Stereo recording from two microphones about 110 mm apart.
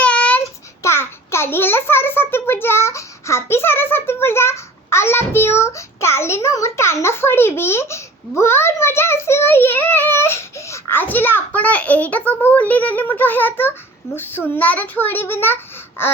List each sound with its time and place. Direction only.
0.0 s child singing: 10° left (ahead or behind)
0.8 s a child's voice: 25° left (ahead or behind)